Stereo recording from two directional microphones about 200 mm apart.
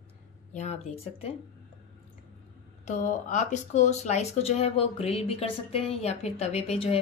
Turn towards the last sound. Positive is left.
turn(degrees=30)  # may be behind; listen again after turning